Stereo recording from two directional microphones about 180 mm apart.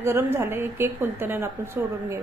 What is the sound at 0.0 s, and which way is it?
A woman's voice, 15° right (ahead or behind).